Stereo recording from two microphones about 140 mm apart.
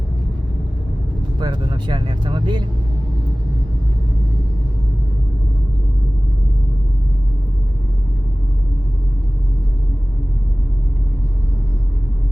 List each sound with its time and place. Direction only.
1.4 s speech: 30° right (ahead or behind)